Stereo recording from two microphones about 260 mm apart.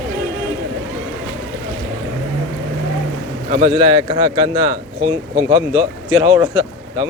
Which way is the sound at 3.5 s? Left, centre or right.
Right.